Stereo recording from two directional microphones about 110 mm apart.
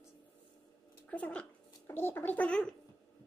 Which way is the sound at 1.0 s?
15° left (ahead or behind).